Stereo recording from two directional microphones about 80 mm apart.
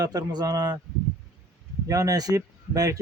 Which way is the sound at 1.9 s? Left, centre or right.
Right.